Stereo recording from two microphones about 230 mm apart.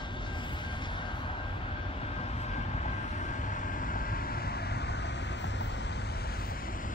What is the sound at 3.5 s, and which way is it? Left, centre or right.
Vehicle, left.